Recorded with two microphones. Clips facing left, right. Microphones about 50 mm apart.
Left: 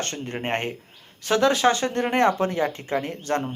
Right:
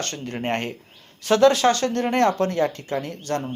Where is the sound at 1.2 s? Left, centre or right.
Centre.